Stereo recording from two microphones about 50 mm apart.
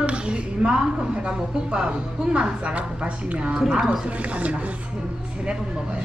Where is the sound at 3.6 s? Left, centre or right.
Centre.